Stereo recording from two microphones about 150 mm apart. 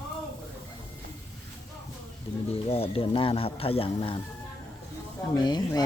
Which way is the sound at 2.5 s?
40° left (ahead or behind).